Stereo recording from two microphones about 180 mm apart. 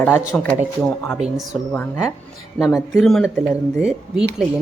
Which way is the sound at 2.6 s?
Centre (ahead or behind).